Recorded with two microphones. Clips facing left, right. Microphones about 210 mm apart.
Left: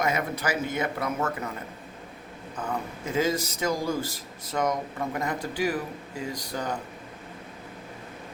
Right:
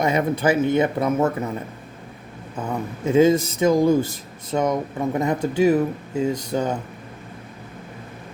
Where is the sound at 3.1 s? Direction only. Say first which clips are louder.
Right 11 dB; 25° right (ahead or behind).